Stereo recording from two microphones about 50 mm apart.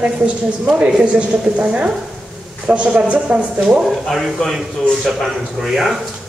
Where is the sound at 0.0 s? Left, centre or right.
Right.